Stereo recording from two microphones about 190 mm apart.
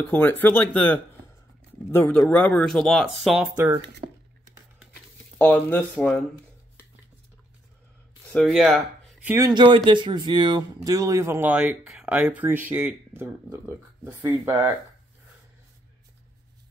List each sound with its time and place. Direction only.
0.1 s speech: 10° left (ahead or behind); by 3.8 s 10° right (ahead or behind)
4.0 s tearing: 40° right (ahead or behind)
5.4 s speech: 5° left (ahead or behind)
8.3 s speech: centre (ahead or behind)
9.3 s speech: 20° right (ahead or behind)